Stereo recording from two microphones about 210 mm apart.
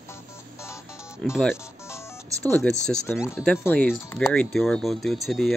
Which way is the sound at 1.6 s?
15° left (ahead or behind).